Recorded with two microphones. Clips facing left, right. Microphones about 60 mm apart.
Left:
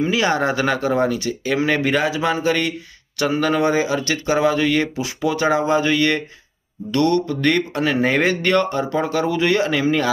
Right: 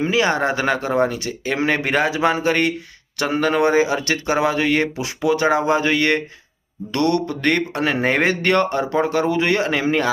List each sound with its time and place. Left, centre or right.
0.0 s speech: right
3.6 s speech: right
4.9 s speech: right
5.3 s speech: right
7.3 s speech: right